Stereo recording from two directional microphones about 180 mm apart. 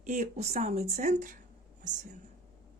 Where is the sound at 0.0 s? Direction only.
45° right (ahead or behind).